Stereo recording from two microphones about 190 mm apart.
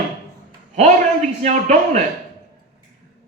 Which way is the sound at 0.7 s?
40° right (ahead or behind).